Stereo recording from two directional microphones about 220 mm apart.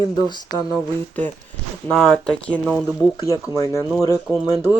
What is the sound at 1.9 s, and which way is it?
Speech, 5° left (ahead or behind).